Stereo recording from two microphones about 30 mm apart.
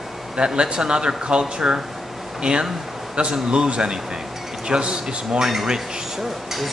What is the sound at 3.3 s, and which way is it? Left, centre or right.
Speech, right.